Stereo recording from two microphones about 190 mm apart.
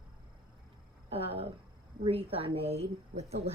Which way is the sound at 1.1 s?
30° right (ahead or behind).